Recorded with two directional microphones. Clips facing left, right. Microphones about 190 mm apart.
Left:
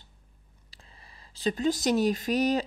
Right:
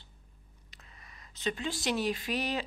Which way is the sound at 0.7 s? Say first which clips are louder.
Left 2 dB; 30° left (ahead or behind).